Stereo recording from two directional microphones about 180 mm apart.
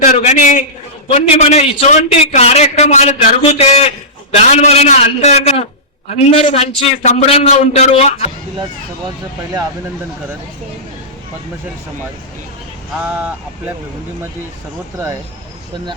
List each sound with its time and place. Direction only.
0.2 s a man's voice: 40° left (ahead or behind)
13.0 s speech: 10° right (ahead or behind)
14.9 s speech: 15° right (ahead or behind)